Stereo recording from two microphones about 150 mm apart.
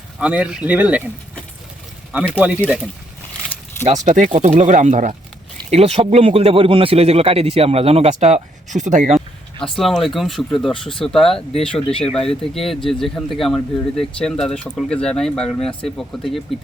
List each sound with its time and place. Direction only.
0.2 s speech: 10° right (ahead or behind)
2.4 s speech: 10° right (ahead or behind)
4.0 s speech: 60° right (ahead or behind)
5.7 s speech: 45° right (ahead or behind)
9.1 s speech: centre (ahead or behind)